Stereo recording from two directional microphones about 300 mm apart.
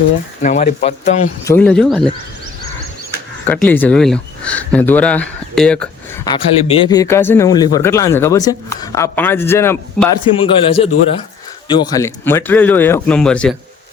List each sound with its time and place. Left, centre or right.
0.4 s speech: left
1.5 s speech: centre
3.4 s speech: centre
6.2 s speech: centre